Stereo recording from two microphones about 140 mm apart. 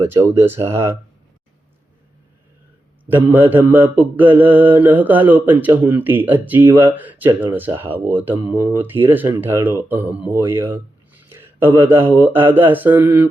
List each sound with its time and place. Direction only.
0.0 s speech: 15° right (ahead or behind)
3.1 s mantra: 15° right (ahead or behind)
11.2 s speech: 15° right (ahead or behind)